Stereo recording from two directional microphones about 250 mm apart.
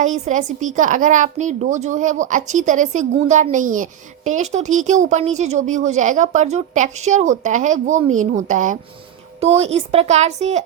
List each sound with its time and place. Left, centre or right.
0.0 s a woman's voice: right